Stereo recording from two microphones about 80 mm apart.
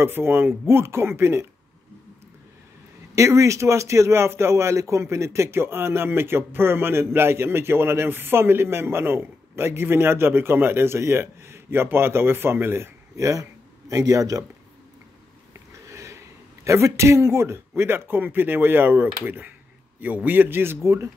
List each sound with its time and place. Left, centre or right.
0.0 s a man's voice: right
3.2 s a man's voice: right
13.3 s speech: right
15.9 s a sound: right
16.6 s a man's voice: right